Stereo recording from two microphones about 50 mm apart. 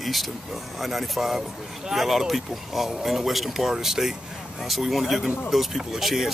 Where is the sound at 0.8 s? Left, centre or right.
Centre.